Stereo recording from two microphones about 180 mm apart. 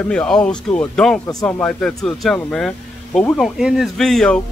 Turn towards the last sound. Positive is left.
turn(degrees=5)  # may be behind; listen again after turning